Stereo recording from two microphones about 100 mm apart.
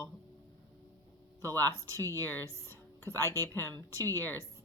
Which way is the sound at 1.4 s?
25° left (ahead or behind).